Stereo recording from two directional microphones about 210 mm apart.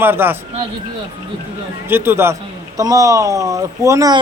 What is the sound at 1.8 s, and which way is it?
Speech, 10° right (ahead or behind).